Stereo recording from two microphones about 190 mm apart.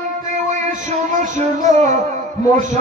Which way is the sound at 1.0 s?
40° right (ahead or behind).